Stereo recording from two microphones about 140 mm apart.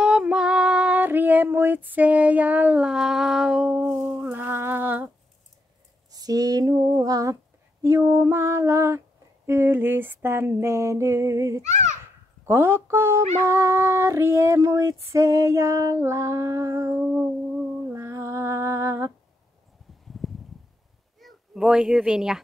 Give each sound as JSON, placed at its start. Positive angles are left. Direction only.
{"t": 0.0, "sound": "female singing", "side_deg": -5}
{"t": 6.1, "sound": "female singing", "side_deg": -25}
{"t": 20.2, "sound": "a sound", "side_deg": 0}
{"t": 21.2, "sound": "speech", "side_deg": 0}